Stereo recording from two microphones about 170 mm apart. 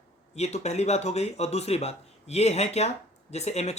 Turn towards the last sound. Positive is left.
turn(degrees=40)  # may be behind; listen again after turning